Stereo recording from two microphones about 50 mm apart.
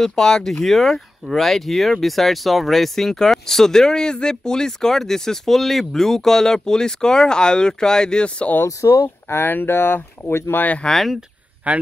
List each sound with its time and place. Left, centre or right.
0.0 s speech: centre
8.6 s speech: left
9.4 s speech: left
11.7 s speech: right